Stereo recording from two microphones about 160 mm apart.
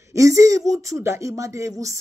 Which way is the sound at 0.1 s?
20° right (ahead or behind).